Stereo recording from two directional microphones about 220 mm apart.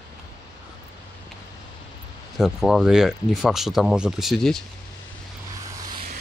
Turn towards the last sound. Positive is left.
turn(degrees=0)  # may be behind; listen again after turning